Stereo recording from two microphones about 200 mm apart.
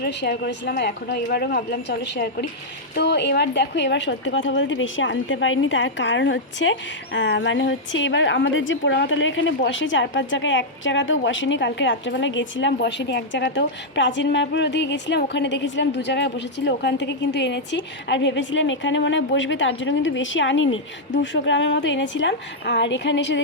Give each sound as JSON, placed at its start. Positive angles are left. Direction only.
{"t": 0.0, "sound": "a woman's voice", "side_deg": 55}